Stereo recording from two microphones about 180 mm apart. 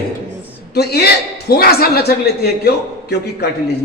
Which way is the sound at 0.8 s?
65° left (ahead or behind).